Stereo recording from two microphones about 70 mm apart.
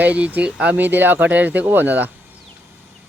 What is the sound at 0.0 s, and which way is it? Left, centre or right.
Speech, right.